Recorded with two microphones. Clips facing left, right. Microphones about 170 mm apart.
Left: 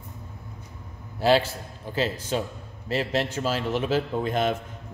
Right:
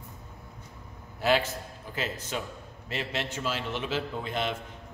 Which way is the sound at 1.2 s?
30° left (ahead or behind).